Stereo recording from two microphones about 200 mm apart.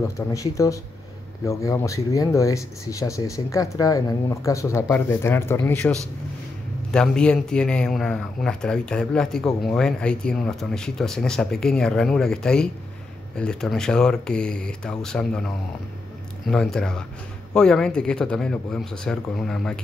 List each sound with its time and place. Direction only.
0.3 s speech: 15° left (ahead or behind)